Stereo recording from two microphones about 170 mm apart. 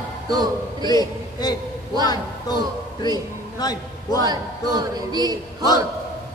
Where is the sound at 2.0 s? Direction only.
25° left (ahead or behind).